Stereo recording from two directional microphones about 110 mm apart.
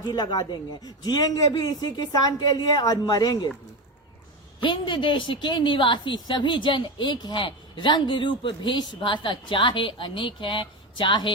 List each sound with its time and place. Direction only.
0.1 s a man's voice: 40° left (ahead or behind)
4.6 s a woman's voice: 50° left (ahead or behind)